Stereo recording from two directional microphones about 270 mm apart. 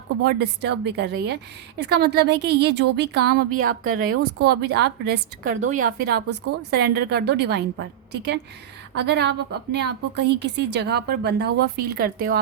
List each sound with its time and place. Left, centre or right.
0.3 s a woman's voice: right
5.5 s a woman's voice: right